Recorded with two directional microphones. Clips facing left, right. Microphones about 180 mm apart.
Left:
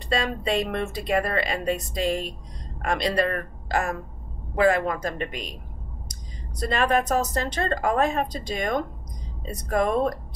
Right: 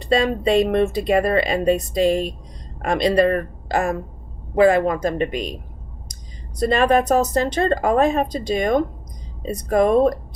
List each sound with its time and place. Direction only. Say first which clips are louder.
0.1 s speech: right 8 dB; 20° right (ahead or behind)
6.6 s speech: right 6 dB; 20° right (ahead or behind)